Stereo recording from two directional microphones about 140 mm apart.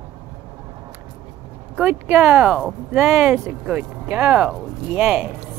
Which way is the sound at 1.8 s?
15° right (ahead or behind).